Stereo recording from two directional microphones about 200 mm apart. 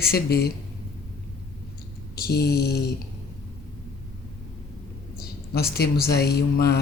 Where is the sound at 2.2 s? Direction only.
50° left (ahead or behind).